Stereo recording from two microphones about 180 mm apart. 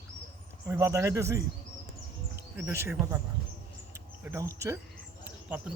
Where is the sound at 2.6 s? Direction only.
15° right (ahead or behind).